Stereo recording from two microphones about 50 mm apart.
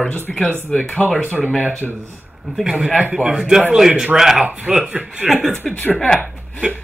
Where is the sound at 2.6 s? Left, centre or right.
Right.